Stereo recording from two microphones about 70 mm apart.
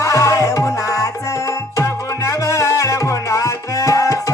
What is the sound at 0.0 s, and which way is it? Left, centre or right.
Music, left.